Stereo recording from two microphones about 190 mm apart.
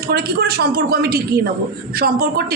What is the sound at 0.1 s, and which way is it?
A woman's voice, 55° right (ahead or behind).